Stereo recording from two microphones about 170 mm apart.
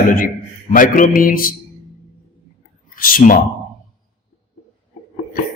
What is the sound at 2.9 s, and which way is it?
Speech, 55° left (ahead or behind).